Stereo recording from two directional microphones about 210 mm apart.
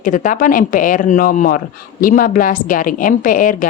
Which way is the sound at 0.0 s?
40° left (ahead or behind).